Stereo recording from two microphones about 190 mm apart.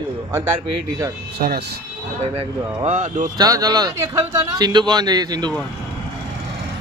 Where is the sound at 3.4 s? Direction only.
20° right (ahead or behind).